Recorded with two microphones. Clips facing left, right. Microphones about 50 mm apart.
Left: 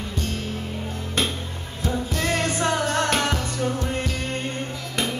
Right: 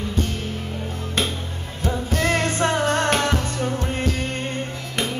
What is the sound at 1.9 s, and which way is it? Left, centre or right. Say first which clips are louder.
Music: right 3 dB; right.